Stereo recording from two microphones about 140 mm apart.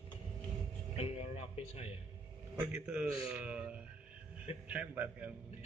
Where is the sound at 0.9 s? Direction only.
45° left (ahead or behind).